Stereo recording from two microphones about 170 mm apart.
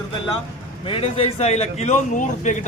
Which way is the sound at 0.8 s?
30° left (ahead or behind).